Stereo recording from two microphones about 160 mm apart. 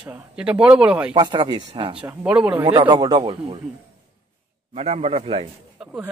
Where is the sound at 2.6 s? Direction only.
30° right (ahead or behind).